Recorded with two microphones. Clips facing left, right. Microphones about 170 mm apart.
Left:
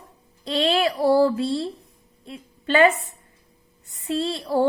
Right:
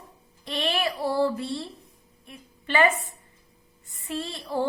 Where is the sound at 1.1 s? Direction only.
75° left (ahead or behind).